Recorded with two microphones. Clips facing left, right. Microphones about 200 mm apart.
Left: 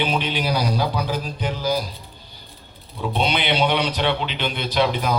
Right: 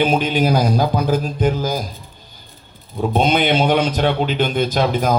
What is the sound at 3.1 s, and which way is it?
A man's voice, 45° right (ahead or behind).